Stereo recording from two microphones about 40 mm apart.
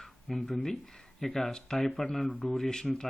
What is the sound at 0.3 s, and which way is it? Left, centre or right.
Speech, centre.